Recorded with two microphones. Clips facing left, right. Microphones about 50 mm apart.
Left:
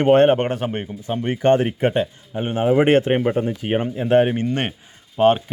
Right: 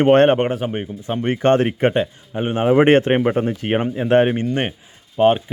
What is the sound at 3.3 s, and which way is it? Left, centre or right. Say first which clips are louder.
Speech: right 2 dB; right.